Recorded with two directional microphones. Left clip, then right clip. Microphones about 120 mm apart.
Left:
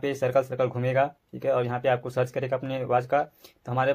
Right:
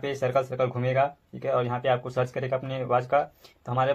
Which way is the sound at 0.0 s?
25° left (ahead or behind).